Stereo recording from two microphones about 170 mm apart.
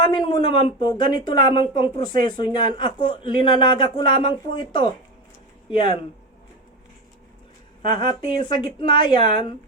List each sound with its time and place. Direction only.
0.0 s speech: 25° left (ahead or behind)
7.9 s speech: 25° left (ahead or behind)